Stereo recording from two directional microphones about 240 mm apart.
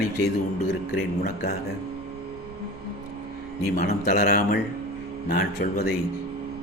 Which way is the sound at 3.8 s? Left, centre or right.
Left.